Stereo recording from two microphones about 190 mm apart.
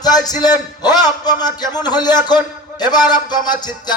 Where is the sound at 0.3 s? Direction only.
20° left (ahead or behind).